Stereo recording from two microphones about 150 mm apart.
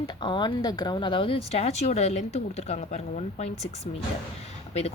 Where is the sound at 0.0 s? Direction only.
30° left (ahead or behind).